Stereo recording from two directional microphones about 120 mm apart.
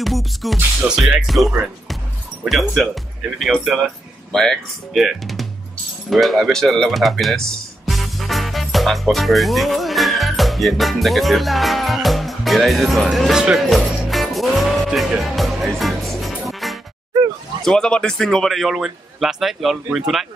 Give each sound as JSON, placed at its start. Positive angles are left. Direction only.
{"t": 0.0, "sound": "speech", "side_deg": 0}
{"t": 6.0, "sound": "music", "side_deg": 0}
{"t": 17.1, "sound": "a sound", "side_deg": -35}
{"t": 17.6, "sound": "speech", "side_deg": 5}